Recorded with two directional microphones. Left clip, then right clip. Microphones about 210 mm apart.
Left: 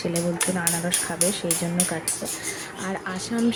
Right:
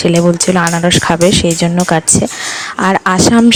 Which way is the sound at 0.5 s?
45° right (ahead or behind).